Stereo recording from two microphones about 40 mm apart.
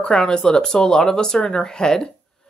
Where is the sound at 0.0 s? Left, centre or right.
Centre.